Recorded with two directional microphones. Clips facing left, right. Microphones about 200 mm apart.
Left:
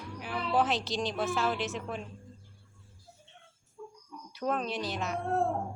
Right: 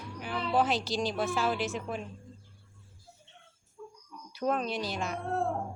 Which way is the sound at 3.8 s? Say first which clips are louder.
Left 1 dB; 10° left (ahead or behind).